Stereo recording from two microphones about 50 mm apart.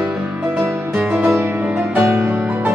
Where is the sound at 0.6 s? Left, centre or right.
Right.